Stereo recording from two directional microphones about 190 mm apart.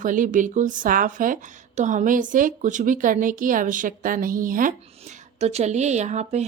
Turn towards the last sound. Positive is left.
turn(degrees=-35)  # may be behind; listen again after turning